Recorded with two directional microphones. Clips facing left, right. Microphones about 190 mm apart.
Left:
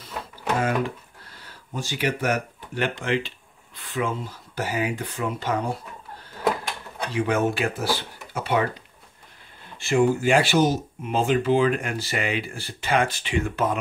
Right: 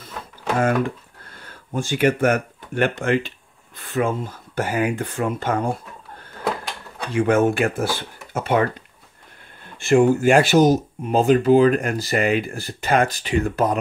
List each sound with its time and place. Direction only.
0.6 s speech: 50° right (ahead or behind)
9.8 s speech: 50° right (ahead or behind)